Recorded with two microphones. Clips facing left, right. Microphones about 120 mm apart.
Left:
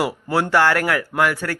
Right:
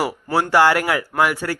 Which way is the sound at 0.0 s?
5° right (ahead or behind).